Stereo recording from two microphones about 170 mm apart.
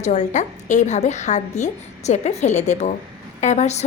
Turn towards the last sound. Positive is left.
turn(degrees=40)  # may be behind; listen again after turning